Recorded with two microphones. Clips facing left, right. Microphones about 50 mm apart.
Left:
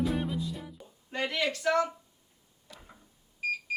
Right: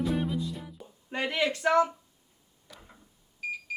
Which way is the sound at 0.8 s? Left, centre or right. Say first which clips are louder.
Right 1 dB; centre.